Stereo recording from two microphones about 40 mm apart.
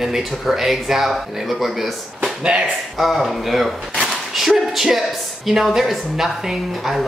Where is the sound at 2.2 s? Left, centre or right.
Right.